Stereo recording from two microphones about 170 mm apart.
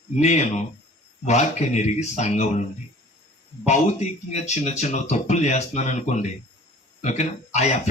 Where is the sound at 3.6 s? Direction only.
40° left (ahead or behind).